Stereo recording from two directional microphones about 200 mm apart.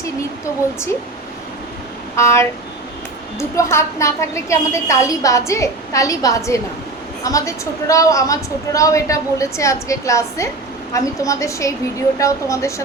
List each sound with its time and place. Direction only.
2.1 s a woman's voice: 15° left (ahead or behind)